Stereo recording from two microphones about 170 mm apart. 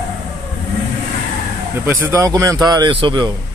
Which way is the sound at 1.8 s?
15° right (ahead or behind).